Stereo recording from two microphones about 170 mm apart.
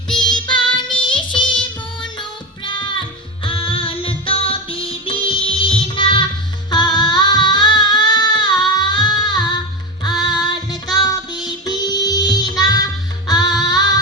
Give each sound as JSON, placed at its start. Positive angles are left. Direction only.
{"t": 0.2, "sound": "music", "side_deg": 25}
{"t": 2.6, "sound": "music", "side_deg": 30}
{"t": 6.7, "sound": "singing", "side_deg": 25}
{"t": 10.0, "sound": "music", "side_deg": 25}